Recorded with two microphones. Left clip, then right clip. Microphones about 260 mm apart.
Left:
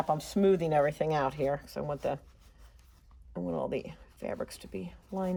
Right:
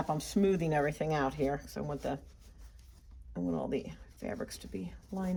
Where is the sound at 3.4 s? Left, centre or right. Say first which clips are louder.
Left 2 dB; left.